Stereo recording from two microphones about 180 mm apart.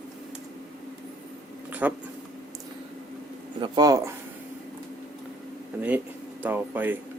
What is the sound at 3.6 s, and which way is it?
Speech, 20° right (ahead or behind).